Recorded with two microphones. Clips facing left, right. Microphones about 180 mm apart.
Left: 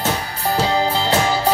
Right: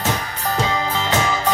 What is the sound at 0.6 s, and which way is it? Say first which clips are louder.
Music: left 4 dB; 35° left (ahead or behind).